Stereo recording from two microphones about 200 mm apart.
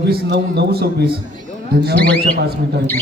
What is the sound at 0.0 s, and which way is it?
Speech, 55° right (ahead or behind).